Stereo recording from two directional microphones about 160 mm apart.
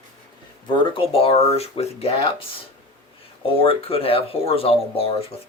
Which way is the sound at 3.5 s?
35° left (ahead or behind).